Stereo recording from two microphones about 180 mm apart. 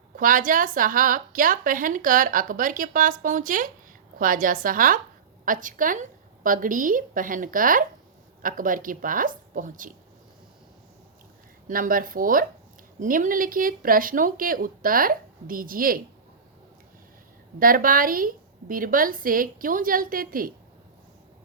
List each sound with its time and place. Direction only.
0.2 s a woman's voice: 50° right (ahead or behind)
11.7 s a woman's voice: 50° right (ahead or behind)
17.6 s a woman's voice: 50° right (ahead or behind)